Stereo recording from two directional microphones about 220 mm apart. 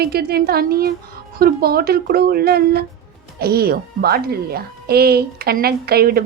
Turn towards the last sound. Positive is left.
turn(degrees=-45)  # may be behind; listen again after turning